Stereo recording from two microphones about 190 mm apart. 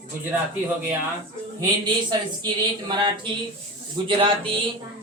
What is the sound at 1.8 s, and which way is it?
Speech, 20° right (ahead or behind).